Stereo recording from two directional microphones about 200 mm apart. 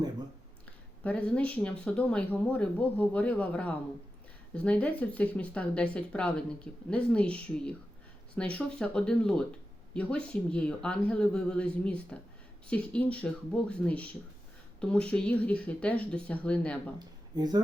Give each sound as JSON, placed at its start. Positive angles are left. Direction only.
{"t": 1.0, "sound": "speech", "side_deg": 5}
{"t": 17.3, "sound": "speech", "side_deg": -20}